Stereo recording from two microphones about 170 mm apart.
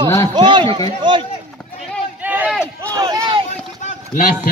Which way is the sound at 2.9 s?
25° right (ahead or behind).